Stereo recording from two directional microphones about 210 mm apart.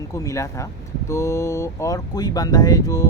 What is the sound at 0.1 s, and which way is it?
Speech, 15° left (ahead or behind).